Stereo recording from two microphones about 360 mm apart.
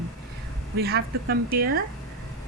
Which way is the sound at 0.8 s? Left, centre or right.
Right.